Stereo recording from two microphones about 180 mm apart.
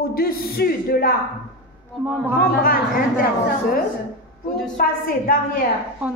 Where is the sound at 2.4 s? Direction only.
55° left (ahead or behind).